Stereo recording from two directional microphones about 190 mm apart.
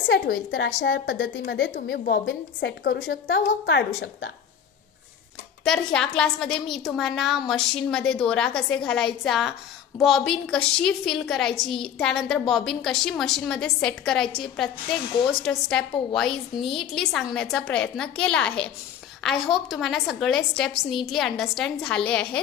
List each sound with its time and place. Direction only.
0.1 s a woman's voice: 60° left (ahead or behind)
5.6 s a woman's voice: 5° left (ahead or behind)